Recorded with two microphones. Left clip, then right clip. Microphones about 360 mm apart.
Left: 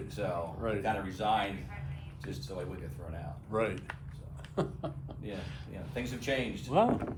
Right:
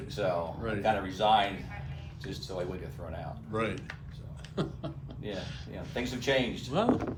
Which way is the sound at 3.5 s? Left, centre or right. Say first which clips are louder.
Left 1 dB; centre.